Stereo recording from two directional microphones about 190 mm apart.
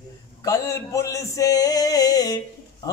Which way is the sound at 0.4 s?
15° left (ahead or behind).